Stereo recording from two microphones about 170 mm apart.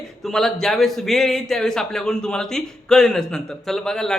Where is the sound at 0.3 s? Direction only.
Centre (ahead or behind).